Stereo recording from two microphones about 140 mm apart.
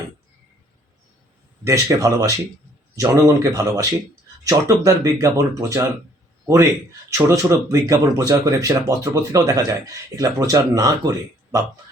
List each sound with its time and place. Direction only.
1.6 s a man's voice: 25° right (ahead or behind)